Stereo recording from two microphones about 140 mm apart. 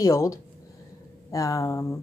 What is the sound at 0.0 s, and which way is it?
A woman's voice, 20° left (ahead or behind).